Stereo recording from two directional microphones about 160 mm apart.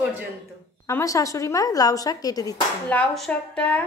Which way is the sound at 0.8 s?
20° left (ahead or behind).